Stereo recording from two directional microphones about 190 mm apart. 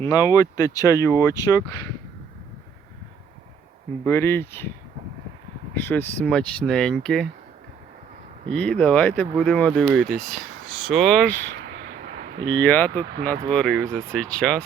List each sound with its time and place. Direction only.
0.0 s speech: 20° left (ahead or behind)
4.0 s speech: 10° left (ahead or behind)
5.9 s speech: 5° left (ahead or behind)
8.4 s speech: 5° left (ahead or behind)
12.5 s speech: 10° left (ahead or behind)